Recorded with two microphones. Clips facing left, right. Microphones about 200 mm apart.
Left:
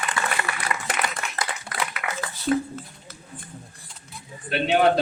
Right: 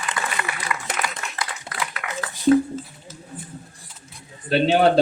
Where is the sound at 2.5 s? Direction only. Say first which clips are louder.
Right 7 dB; 25° right (ahead or behind).